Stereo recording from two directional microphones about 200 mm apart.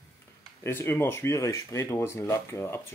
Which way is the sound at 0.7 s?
10° left (ahead or behind).